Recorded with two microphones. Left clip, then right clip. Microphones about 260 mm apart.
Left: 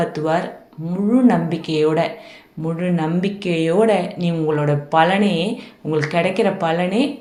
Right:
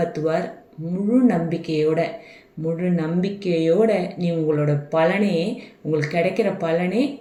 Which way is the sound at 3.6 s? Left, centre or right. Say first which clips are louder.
Left 3 dB; centre.